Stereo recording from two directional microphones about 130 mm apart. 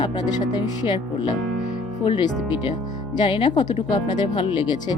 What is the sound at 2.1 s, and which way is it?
Speech, 35° left (ahead or behind).